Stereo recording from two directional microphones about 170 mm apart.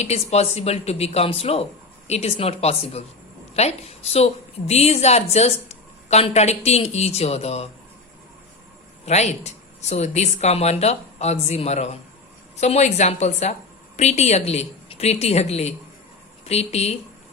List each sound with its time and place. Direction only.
0.0 s a woman's voice: 40° left (ahead or behind)
9.0 s a woman's voice: 40° left (ahead or behind)